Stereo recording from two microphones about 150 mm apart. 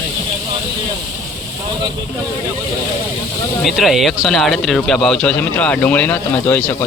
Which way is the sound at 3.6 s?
Centre (ahead or behind).